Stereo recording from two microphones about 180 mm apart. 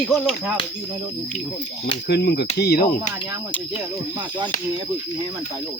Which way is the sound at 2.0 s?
65° left (ahead or behind).